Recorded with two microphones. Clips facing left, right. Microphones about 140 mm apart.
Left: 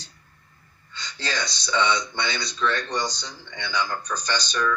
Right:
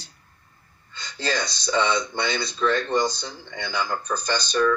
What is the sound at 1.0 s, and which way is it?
Speech, 50° right (ahead or behind).